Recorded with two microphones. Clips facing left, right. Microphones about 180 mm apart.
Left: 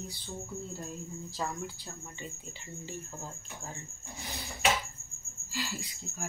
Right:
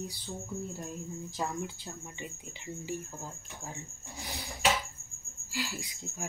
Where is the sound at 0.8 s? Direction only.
15° right (ahead or behind).